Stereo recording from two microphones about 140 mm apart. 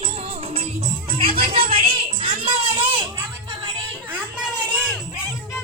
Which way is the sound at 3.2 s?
25° right (ahead or behind).